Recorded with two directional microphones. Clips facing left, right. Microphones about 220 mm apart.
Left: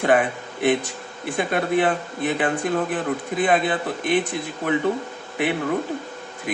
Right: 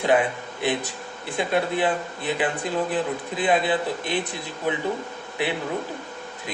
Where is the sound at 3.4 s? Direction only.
50° left (ahead or behind).